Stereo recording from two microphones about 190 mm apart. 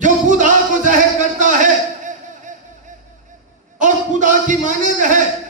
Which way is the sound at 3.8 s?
40° right (ahead or behind).